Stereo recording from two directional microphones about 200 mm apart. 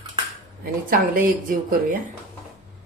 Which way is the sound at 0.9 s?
45° right (ahead or behind).